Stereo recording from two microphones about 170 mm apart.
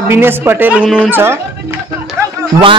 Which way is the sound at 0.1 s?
15° right (ahead or behind).